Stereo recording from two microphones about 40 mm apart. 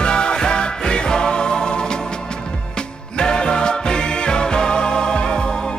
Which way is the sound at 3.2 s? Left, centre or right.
Left.